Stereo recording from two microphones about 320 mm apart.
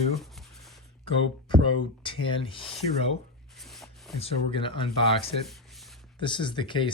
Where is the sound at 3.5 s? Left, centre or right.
Centre.